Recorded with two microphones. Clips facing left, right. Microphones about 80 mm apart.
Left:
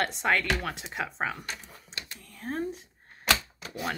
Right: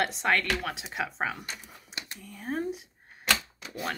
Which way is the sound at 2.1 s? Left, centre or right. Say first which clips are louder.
Right 1 dB; centre.